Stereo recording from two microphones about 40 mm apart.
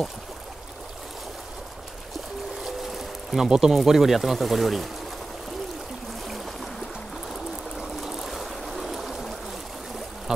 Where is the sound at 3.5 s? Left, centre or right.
Centre.